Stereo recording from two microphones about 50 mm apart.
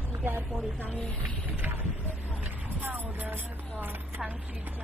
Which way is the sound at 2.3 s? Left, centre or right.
Right.